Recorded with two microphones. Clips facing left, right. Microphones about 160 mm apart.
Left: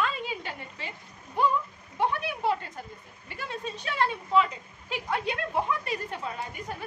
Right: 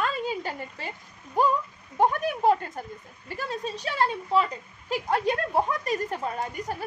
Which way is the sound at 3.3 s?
35° right (ahead or behind).